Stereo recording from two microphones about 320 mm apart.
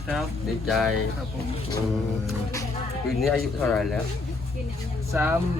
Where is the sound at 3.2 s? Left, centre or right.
Centre.